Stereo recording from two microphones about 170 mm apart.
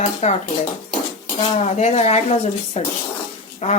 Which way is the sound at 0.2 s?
40° left (ahead or behind).